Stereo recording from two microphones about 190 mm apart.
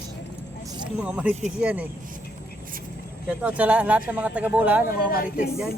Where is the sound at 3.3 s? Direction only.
5° right (ahead or behind).